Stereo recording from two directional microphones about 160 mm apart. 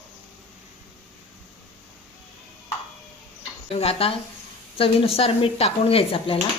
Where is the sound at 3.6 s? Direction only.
40° left (ahead or behind).